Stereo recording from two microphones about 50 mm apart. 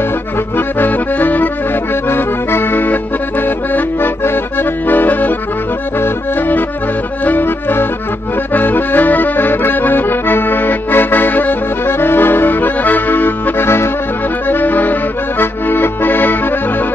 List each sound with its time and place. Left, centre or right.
0.6 s accordion: left
2.0 s accordion: left
7.2 s accordion: left
14.5 s accordion: left